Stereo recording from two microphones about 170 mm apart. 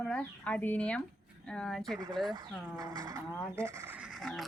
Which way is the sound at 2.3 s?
20° right (ahead or behind).